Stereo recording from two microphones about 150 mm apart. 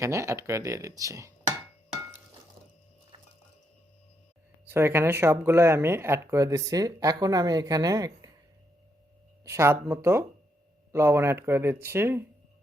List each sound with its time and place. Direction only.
0.0 s speech: 20° right (ahead or behind)
4.7 s speech: 15° right (ahead or behind)
9.4 s speech: 20° right (ahead or behind)